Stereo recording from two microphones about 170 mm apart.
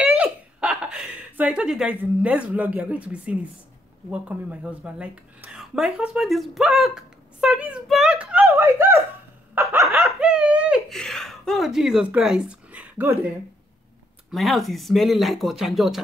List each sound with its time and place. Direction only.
0.0 s a sound: 5° right (ahead or behind)
4.1 s speech: 10° right (ahead or behind)
9.6 s snicker: 15° right (ahead or behind)
9.8 s laughter: centre (ahead or behind)
14.3 s speech: centre (ahead or behind)